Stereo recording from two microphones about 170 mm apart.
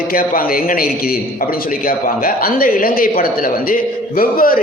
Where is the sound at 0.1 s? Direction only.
60° left (ahead or behind).